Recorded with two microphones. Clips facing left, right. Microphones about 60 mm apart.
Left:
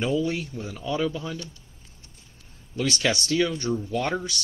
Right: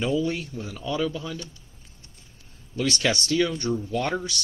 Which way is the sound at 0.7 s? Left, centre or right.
Centre.